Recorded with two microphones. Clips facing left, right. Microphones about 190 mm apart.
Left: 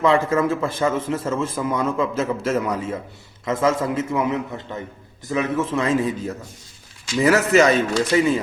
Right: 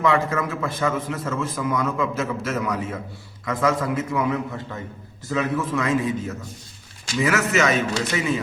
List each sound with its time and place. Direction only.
0.0 s a man's voice: 30° left (ahead or behind)